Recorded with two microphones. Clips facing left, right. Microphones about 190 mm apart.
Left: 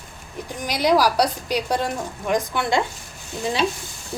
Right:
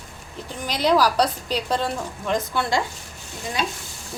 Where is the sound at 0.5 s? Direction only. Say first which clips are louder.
Left 1 dB; 10° left (ahead or behind).